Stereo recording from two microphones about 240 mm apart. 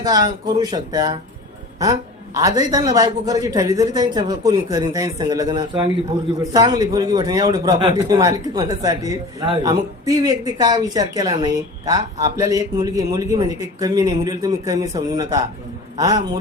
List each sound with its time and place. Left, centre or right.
0.0 s a woman's voice: centre